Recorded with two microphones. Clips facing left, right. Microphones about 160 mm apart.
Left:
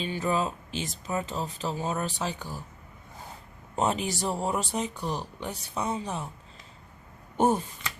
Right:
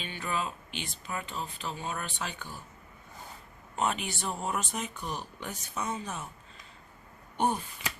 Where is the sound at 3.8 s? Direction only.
35° left (ahead or behind).